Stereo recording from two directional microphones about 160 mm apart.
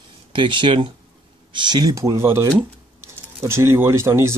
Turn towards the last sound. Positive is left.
turn(degrees=-15)  # may be behind; listen again after turning